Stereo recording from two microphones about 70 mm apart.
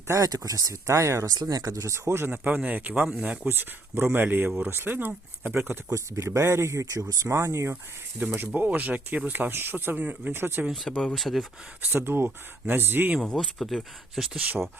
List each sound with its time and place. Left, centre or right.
0.3 s speech: right
1.4 s speech: right
1.8 s speech: right
2.2 s speech: right
5.9 s speech: right
8.2 s speech: right
10.7 s speech: centre
11.9 s speech: right
13.1 s speech: centre